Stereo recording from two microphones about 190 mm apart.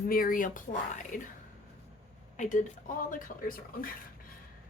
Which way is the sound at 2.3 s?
40° left (ahead or behind).